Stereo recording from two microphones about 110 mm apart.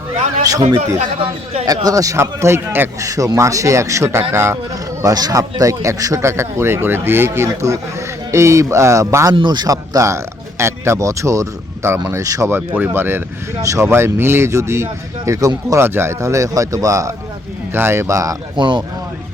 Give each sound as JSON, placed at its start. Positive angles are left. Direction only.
{"t": 0.9, "sound": "speech", "side_deg": -75}
{"t": 1.6, "sound": "speech", "side_deg": -35}
{"t": 9.3, "sound": "speech", "side_deg": -45}
{"t": 18.5, "sound": "speech", "side_deg": -45}